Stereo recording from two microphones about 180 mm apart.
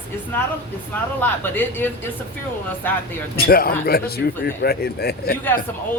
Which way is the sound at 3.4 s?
55° left (ahead or behind).